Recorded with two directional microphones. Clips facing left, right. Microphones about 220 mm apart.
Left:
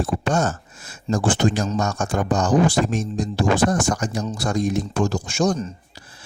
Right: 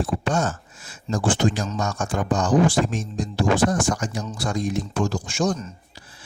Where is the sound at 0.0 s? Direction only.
45° left (ahead or behind).